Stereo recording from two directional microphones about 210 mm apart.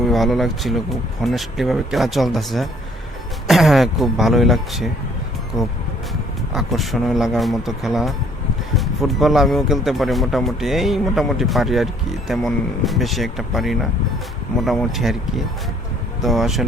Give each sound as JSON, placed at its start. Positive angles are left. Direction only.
{"t": 0.1, "sound": "speech", "side_deg": 0}
{"t": 16.2, "sound": "speech", "side_deg": 0}